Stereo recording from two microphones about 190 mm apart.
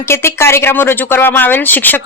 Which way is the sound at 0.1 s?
15° left (ahead or behind).